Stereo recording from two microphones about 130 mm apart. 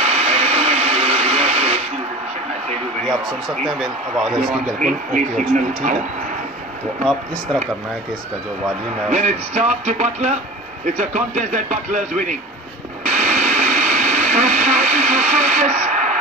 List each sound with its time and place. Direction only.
0.0 s vehicle: 55° right (ahead or behind)
3.1 s a man's voice: centre (ahead or behind)
4.7 s speech: 90° right
9.1 s speech: 65° right (ahead or behind)
13.0 s radio: 65° right (ahead or behind)